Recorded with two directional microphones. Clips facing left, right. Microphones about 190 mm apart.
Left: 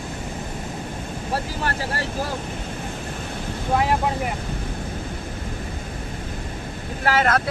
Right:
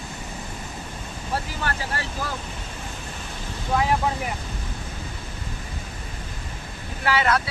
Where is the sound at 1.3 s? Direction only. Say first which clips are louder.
Left 2 dB; 40° left (ahead or behind).